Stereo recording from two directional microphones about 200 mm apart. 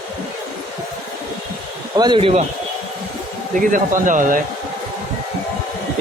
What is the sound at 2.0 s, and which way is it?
Speech, 25° right (ahead or behind).